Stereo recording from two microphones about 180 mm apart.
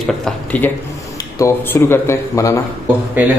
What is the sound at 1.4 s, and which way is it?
Speech, 15° left (ahead or behind).